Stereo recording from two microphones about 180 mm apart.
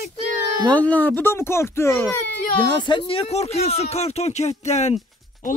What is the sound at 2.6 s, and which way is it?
Speech, 25° left (ahead or behind).